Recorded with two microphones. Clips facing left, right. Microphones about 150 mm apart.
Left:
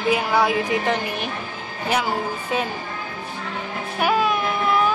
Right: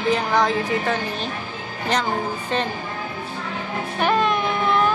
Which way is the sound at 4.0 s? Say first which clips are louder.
Even; 5° left (ahead or behind).